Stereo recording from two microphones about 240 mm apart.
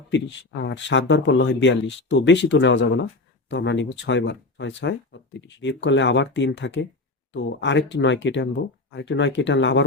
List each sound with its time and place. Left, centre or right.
0.1 s speech: left